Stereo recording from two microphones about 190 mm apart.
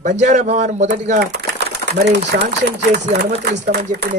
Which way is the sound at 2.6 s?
60° right (ahead or behind).